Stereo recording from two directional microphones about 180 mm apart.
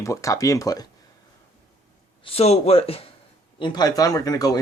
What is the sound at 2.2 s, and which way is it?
Speech, 35° left (ahead or behind).